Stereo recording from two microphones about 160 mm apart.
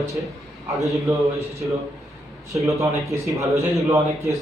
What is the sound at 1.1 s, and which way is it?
Speech, 20° right (ahead or behind).